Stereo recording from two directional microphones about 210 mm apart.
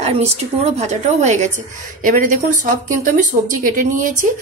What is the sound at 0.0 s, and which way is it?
A woman's voice, 30° right (ahead or behind).